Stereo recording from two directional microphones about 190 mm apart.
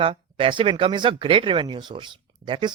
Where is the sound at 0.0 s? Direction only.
30° right (ahead or behind).